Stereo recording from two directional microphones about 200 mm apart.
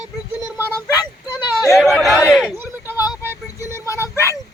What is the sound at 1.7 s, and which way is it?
Speech, centre (ahead or behind).